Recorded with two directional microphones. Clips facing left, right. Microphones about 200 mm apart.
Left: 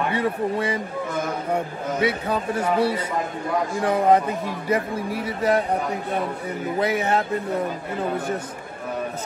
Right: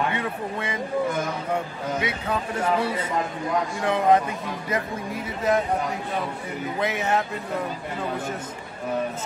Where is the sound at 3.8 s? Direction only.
35° left (ahead or behind).